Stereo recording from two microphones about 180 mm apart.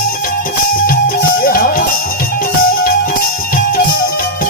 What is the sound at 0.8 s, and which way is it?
Music, 55° left (ahead or behind).